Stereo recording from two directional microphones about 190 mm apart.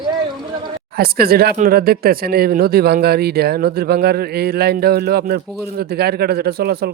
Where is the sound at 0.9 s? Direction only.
55° right (ahead or behind).